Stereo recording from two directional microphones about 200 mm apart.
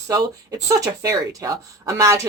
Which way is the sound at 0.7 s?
15° right (ahead or behind).